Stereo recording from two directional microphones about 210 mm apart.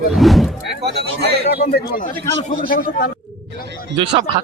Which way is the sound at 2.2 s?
60° right (ahead or behind).